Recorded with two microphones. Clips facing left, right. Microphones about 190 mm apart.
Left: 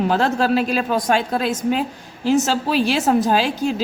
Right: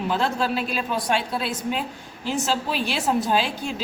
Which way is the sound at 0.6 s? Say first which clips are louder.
Left 7 dB; 40° left (ahead or behind).